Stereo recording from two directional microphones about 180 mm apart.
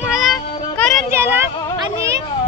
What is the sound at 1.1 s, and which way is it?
Speech, 15° right (ahead or behind).